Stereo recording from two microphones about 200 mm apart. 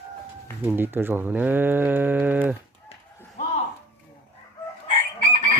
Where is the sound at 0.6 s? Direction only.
10° right (ahead or behind).